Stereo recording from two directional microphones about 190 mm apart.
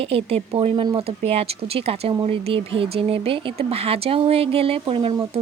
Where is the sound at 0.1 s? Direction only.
30° right (ahead or behind).